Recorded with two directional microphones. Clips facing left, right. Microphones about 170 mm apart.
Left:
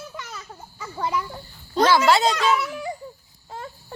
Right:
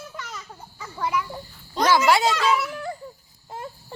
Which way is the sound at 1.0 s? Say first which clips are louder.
Even; 20° left (ahead or behind).